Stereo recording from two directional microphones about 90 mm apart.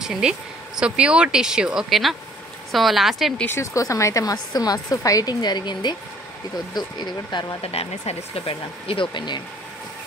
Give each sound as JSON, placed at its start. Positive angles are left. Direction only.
{"t": 0.0, "sound": "speech", "side_deg": -5}
{"t": 3.4, "sound": "speech", "side_deg": 35}
{"t": 7.6, "sound": "speech", "side_deg": 90}